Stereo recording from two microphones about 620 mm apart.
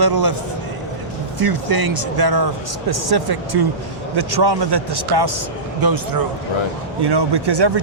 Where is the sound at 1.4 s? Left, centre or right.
Right.